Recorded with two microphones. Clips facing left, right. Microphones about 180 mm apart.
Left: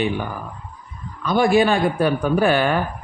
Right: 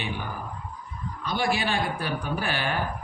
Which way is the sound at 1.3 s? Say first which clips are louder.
Left 11 dB; 50° left (ahead or behind).